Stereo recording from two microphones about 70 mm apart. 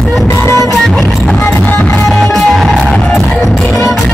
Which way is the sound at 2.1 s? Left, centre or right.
Centre.